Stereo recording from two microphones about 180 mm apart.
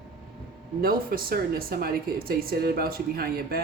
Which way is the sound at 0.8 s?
55° right (ahead or behind).